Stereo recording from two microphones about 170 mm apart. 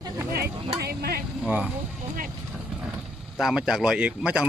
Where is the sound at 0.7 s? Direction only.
65° right (ahead or behind).